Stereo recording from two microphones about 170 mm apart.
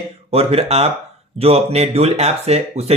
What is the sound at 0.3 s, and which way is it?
Speech, 35° right (ahead or behind).